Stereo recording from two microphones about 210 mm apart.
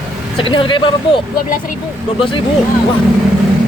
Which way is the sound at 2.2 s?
25° left (ahead or behind).